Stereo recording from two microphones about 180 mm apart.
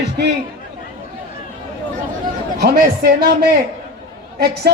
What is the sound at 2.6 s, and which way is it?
A man's voice, 60° right (ahead or behind).